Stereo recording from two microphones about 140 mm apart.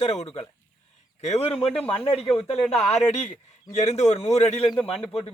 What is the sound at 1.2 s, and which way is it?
Speech, 50° left (ahead or behind).